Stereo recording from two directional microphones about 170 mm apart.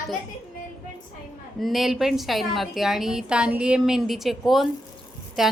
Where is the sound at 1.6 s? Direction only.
Centre (ahead or behind).